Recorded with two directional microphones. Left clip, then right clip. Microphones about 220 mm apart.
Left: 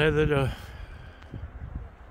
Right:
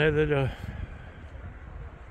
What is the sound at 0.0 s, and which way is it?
Speech, 10° left (ahead or behind).